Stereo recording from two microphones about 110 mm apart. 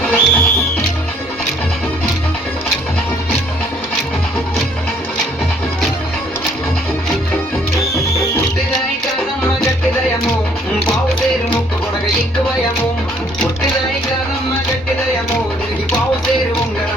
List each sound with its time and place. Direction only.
0.0 s music: 10° left (ahead or behind)
7.9 s music: 30° left (ahead or behind)